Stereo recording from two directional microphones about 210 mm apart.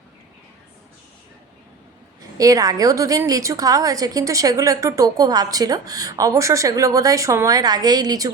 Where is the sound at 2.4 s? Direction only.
15° right (ahead or behind).